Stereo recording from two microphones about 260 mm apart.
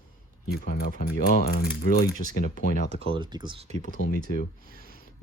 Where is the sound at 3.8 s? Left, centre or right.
Left.